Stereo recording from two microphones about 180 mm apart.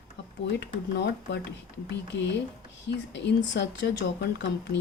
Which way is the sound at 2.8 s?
75° left (ahead or behind).